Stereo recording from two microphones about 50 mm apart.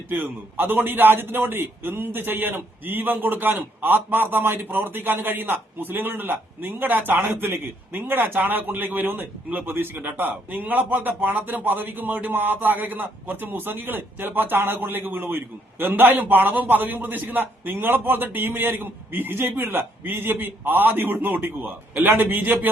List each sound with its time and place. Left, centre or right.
0.1 s a man's voice: right